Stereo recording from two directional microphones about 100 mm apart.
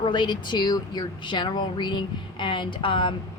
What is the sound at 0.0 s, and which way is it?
A woman's voice, 50° left (ahead or behind).